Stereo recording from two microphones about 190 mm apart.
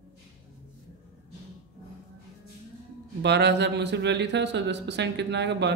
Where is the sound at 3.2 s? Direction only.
65° right (ahead or behind).